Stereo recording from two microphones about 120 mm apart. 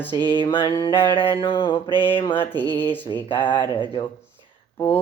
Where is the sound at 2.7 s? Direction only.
15° left (ahead or behind).